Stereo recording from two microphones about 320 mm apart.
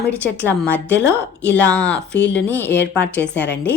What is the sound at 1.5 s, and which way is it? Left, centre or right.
A woman's voice, centre.